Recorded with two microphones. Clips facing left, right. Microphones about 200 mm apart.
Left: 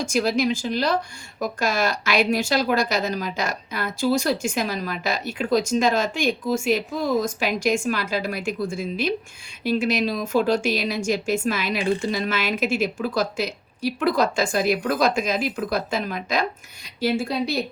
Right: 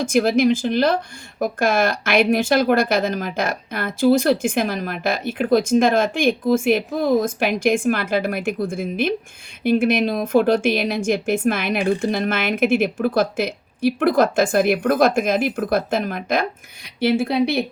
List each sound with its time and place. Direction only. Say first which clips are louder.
0.0 s a woman's voice: right 5 dB; 50° right (ahead or behind)